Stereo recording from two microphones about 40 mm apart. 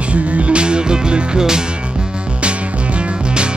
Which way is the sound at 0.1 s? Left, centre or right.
Right.